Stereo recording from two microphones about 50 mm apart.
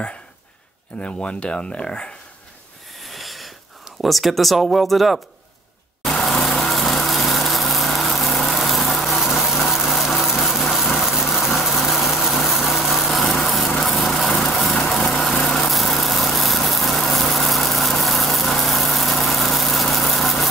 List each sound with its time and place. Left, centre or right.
1.0 s speech: left
3.0 s a sound: centre
4.0 s speech: centre
6.0 s lawn mower: centre
9.2 s a sound: centre
10.4 s vehicle: centre